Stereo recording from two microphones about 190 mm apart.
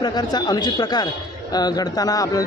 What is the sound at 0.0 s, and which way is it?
A man's voice, 20° left (ahead or behind).